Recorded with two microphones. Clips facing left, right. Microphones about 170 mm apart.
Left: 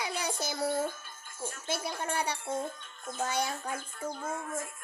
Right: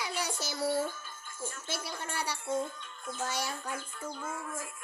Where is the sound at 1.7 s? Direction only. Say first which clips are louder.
Left 7 dB; 55° left (ahead or behind).